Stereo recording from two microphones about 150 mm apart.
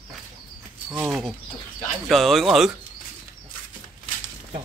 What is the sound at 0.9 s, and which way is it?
Speech, 15° right (ahead or behind).